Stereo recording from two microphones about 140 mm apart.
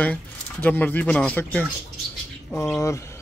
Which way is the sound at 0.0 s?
10° left (ahead or behind).